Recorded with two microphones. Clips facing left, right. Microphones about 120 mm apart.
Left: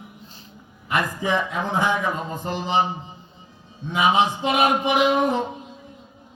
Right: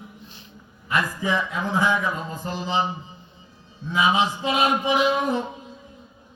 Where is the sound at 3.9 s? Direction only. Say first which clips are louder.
Left 2 dB; 20° left (ahead or behind).